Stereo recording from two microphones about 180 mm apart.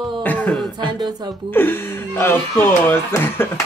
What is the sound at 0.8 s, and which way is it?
Speech, 20° right (ahead or behind).